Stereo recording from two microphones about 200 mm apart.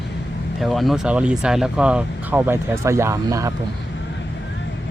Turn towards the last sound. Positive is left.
turn(degrees=-15)  # may be behind; listen again after turning